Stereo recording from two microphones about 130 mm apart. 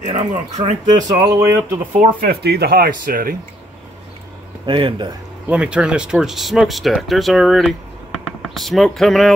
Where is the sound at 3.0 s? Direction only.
90° right.